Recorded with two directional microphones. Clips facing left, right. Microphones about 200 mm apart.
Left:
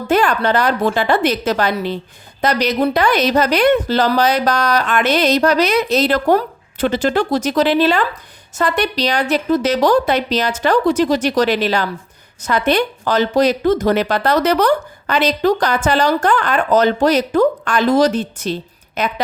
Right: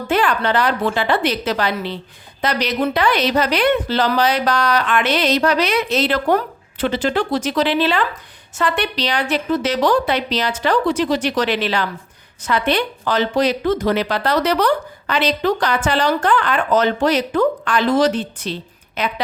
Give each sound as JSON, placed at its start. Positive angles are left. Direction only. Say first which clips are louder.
{"t": 0.1, "sound": "a woman's voice", "louder": "left 3 dB", "side_deg": 45}